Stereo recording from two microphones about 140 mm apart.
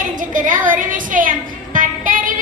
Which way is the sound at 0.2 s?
70° right (ahead or behind).